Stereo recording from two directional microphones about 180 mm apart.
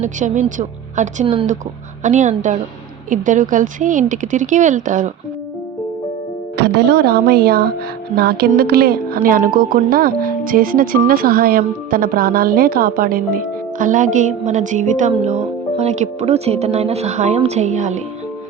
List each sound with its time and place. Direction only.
0.0 s speech: 45° right (ahead or behind)
6.6 s a woman's voice: 65° right (ahead or behind); by 18.0 s 40° right (ahead or behind)